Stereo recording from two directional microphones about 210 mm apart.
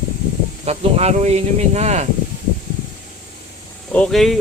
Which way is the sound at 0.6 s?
30° right (ahead or behind).